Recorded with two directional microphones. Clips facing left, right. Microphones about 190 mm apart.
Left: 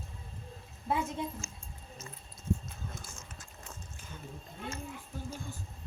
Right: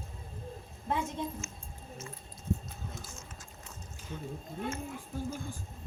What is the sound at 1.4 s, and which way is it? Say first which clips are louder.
Speech: right 2 dB; 35° left (ahead or behind).